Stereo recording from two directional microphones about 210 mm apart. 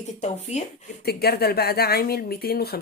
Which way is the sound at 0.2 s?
30° left (ahead or behind).